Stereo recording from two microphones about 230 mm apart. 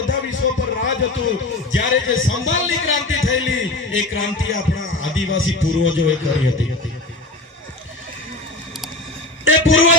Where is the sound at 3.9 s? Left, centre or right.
Left.